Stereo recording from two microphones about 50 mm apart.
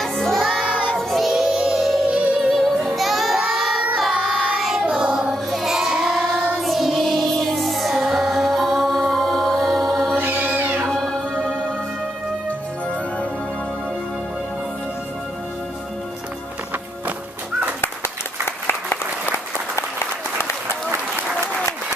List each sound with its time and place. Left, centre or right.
0.0 s music: centre
2.0 s music: right
2.5 s music: centre
3.0 s child singing: centre
4.1 s child singing: centre
5.3 s music: centre
10.1 s music: right
10.9 s music: centre
18.7 s applause: left